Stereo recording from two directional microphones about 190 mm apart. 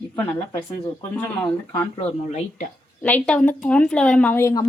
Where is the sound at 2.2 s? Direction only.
35° left (ahead or behind).